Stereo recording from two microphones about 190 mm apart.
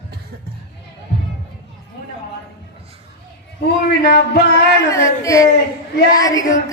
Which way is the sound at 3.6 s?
60° left (ahead or behind).